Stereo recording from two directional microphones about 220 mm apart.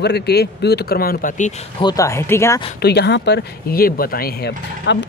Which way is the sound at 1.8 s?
15° left (ahead or behind).